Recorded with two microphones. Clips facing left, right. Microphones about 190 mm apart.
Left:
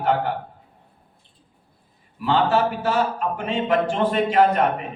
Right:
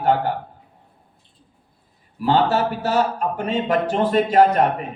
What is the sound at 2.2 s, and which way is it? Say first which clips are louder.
A man's voice: right 1 dB; 40° right (ahead or behind).